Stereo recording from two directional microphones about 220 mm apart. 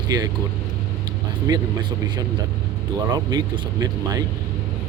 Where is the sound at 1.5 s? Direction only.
15° right (ahead or behind).